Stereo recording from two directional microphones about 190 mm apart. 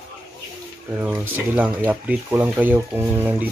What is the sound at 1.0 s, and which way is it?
Speech, 10° right (ahead or behind).